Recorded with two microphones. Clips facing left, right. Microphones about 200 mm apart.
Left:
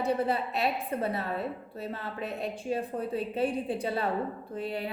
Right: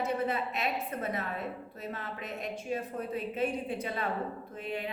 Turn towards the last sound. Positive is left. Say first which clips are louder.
# left 3 dB
turn(degrees=35)  # may be behind; listen again after turning